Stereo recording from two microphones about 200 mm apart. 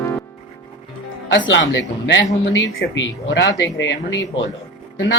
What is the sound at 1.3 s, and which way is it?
Speech, 65° left (ahead or behind).